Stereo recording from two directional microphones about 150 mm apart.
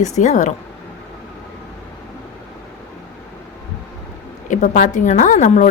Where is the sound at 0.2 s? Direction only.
50° left (ahead or behind).